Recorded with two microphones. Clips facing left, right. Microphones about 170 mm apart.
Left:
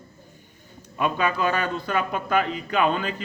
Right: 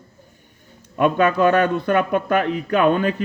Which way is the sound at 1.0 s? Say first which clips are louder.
Right 7 dB; 60° right (ahead or behind).